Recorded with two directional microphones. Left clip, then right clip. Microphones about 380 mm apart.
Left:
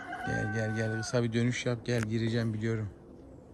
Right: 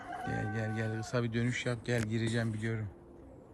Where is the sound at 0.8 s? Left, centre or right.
Centre.